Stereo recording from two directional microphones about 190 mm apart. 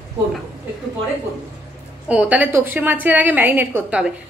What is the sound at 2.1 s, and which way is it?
A woman's voice, 5° right (ahead or behind).